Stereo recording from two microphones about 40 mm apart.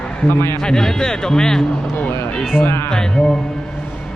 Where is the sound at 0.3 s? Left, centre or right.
Left.